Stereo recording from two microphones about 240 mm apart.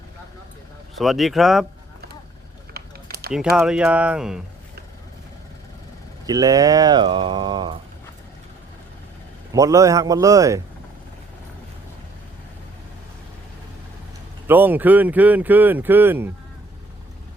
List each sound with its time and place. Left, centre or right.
0.9 s speech: centre
2.7 s a sound: right
3.5 s speech: centre
6.2 s speech: centre
9.5 s speech: centre
14.4 s speech: centre